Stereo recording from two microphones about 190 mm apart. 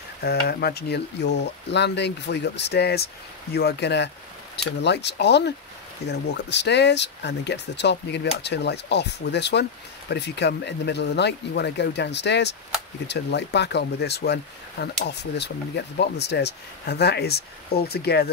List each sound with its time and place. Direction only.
0.2 s speech: 55° left (ahead or behind)